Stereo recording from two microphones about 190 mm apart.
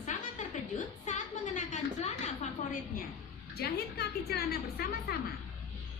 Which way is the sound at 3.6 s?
55° left (ahead or behind).